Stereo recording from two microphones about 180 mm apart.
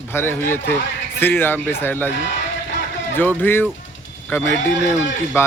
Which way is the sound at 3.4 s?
10° left (ahead or behind).